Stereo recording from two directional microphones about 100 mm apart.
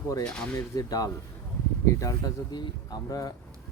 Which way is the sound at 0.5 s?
40° left (ahead or behind).